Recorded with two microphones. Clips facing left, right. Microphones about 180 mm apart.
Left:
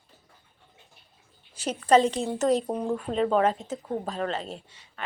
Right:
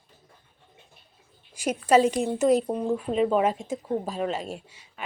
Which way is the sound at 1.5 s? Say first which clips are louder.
Even; 10° right (ahead or behind).